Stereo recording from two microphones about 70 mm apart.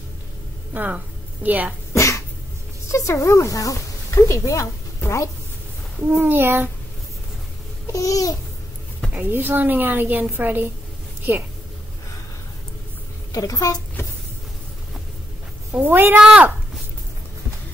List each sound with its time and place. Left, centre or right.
0.7 s a woman's voice: right
2.0 s dog: left
2.9 s a woman's voice: left
6.1 s a woman's voice: right
7.8 s babbling: left
9.1 s a woman's voice: right
13.3 s a child's voice: left
15.7 s a woman's voice: right
16.2 s speech: centre